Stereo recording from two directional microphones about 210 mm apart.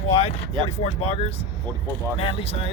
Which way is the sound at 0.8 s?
30° left (ahead or behind).